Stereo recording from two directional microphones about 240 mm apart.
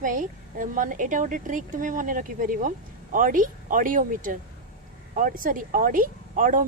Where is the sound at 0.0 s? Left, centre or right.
Right.